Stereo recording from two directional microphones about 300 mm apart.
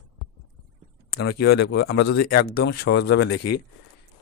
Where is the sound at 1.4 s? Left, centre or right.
Left.